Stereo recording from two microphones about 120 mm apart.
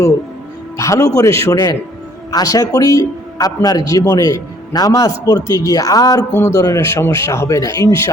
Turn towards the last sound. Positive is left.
turn(degrees=30)  # may be behind; listen again after turning